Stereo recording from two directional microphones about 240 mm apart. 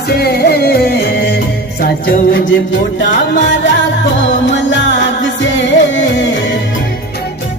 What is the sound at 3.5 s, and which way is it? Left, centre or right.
Music, left.